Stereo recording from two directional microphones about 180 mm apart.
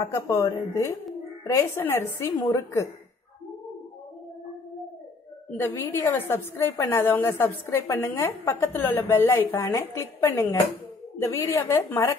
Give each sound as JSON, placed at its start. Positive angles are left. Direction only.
{"t": 0.0, "sound": "a woman's voice", "side_deg": 15}
{"t": 5.6, "sound": "a woman's voice", "side_deg": 10}